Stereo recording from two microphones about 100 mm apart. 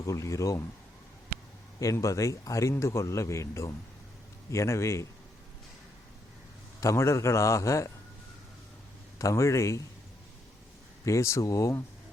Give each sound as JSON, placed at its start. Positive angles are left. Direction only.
{"t": 0.0, "sound": "speech", "side_deg": 30}
{"t": 1.8, "sound": "a man's voice", "side_deg": 35}
{"t": 6.7, "sound": "a man's voice", "side_deg": 30}
{"t": 9.1, "sound": "speech", "side_deg": 30}
{"t": 11.0, "sound": "speech", "side_deg": 30}